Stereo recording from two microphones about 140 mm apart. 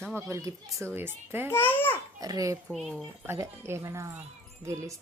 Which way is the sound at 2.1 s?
25° right (ahead or behind).